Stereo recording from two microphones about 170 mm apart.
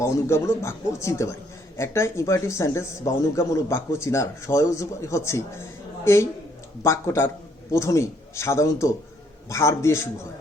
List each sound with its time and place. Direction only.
0.0 s a man's voice: 15° left (ahead or behind)